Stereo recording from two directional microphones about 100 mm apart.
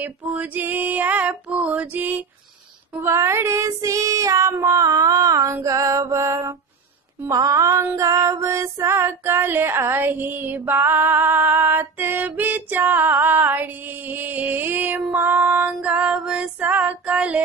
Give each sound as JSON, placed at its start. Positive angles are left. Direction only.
{"t": 0.0, "sound": "female singing", "side_deg": -15}
{"t": 4.8, "sound": "mantra", "side_deg": -35}
{"t": 6.1, "sound": "female singing", "side_deg": -30}
{"t": 7.2, "sound": "mantra", "side_deg": -35}
{"t": 7.8, "sound": "female singing", "side_deg": -30}